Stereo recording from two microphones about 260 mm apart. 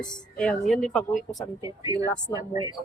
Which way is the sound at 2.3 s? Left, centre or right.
Centre.